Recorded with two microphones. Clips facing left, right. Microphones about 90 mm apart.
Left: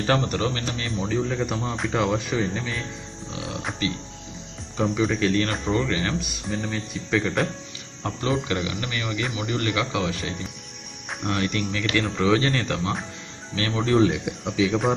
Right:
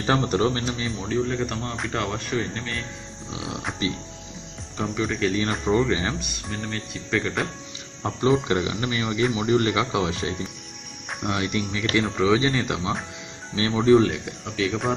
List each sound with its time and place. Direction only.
0.0 s speech: 20° right (ahead or behind)
1.0 s speech: centre (ahead or behind)
4.7 s speech: 5° left (ahead or behind)
5.7 s speech: 15° right (ahead or behind)
6.1 s speech: centre (ahead or behind)
8.0 s speech: 25° right (ahead or behind)
11.2 s speech: 15° right (ahead or behind)
13.9 s speech: 5° left (ahead or behind)